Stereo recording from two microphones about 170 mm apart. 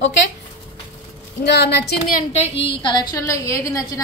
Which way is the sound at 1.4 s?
75° left (ahead or behind).